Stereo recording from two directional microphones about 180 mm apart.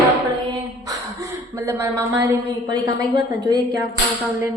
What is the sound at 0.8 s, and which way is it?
A woman's voice, 15° right (ahead or behind).